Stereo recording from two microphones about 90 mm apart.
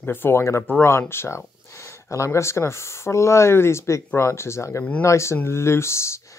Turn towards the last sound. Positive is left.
turn(degrees=35)  # may be behind; listen again after turning